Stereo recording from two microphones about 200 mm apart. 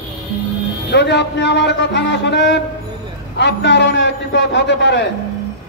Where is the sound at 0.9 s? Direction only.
60° left (ahead or behind).